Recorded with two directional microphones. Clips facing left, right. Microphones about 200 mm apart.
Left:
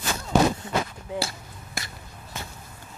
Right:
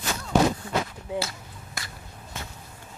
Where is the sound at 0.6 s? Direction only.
20° left (ahead or behind).